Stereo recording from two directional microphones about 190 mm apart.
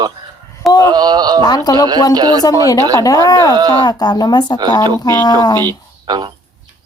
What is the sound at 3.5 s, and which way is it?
Speech, 20° right (ahead or behind).